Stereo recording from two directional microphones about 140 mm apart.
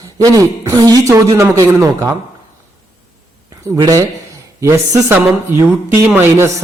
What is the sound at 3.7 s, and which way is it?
Speech, 25° right (ahead or behind).